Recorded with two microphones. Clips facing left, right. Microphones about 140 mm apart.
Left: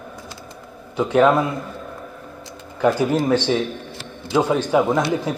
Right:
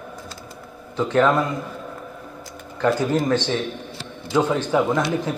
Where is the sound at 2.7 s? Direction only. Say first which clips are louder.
Left 2 dB; 10° left (ahead or behind).